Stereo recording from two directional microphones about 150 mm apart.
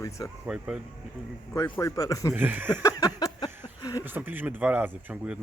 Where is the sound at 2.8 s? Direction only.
25° left (ahead or behind).